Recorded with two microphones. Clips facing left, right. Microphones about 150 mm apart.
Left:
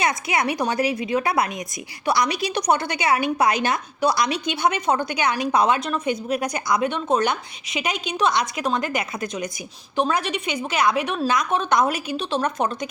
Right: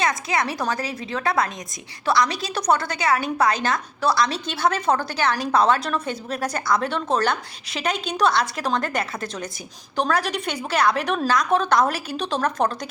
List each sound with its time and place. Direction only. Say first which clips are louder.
0.0 s a woman's voice: left 1 dB; 20° left (ahead or behind)